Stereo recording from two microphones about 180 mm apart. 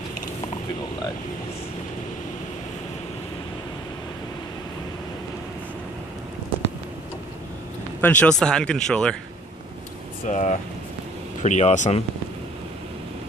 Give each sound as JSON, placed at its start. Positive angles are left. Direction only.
{"t": 8.0, "sound": "speech", "side_deg": 10}
{"t": 10.2, "sound": "speech", "side_deg": 45}